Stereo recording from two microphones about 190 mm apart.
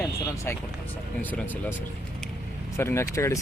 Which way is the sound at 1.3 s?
10° left (ahead or behind).